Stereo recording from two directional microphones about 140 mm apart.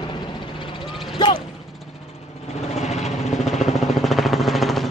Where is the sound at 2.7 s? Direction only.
55° left (ahead or behind).